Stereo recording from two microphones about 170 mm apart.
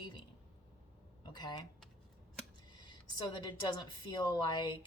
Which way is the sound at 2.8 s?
25° left (ahead or behind).